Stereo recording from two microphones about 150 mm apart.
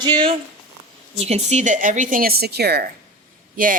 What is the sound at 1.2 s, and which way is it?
A woman's voice, 45° right (ahead or behind).